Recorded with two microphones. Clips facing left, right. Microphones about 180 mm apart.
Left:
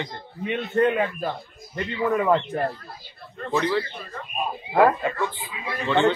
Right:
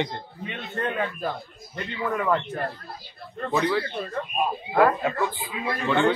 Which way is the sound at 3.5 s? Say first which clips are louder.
Left 1 dB; 5° right (ahead or behind).